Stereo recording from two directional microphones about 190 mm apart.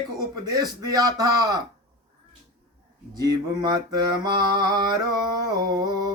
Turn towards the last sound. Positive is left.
turn(degrees=-20)  # may be behind; listen again after turning